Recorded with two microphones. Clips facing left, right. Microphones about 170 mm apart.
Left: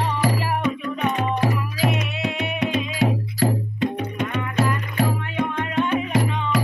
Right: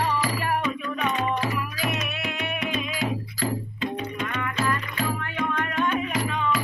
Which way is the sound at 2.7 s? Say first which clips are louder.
Left 6 dB; 70° left (ahead or behind).